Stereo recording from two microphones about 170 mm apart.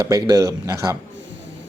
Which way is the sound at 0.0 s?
20° right (ahead or behind).